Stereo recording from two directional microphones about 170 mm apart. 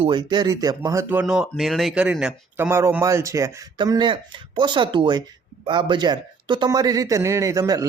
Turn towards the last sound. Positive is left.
turn(degrees=-20)  # may be behind; listen again after turning